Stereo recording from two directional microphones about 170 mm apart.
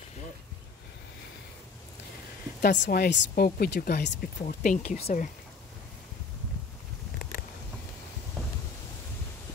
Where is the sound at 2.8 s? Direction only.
75° left (ahead or behind).